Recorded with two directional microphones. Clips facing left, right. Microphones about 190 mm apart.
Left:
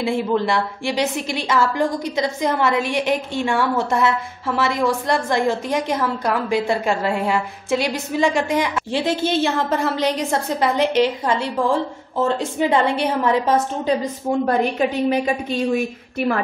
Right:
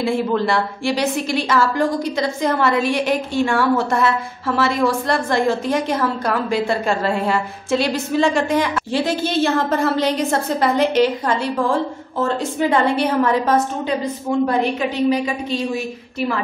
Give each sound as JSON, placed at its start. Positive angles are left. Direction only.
{"t": 0.0, "sound": "a woman's voice", "side_deg": 20}
{"t": 14.4, "sound": "a woman's voice", "side_deg": 45}